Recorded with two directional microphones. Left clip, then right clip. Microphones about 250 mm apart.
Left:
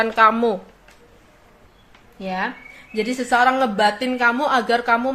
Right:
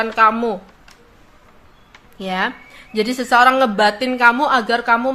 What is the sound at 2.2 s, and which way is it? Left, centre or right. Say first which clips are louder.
A woman's voice: right 4 dB; right.